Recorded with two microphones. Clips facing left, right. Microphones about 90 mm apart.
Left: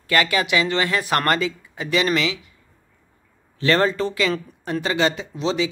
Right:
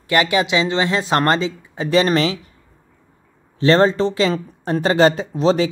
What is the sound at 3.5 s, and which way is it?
Speech, 25° right (ahead or behind).